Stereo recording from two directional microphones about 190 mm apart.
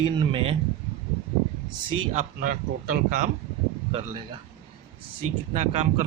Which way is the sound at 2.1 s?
45° right (ahead or behind).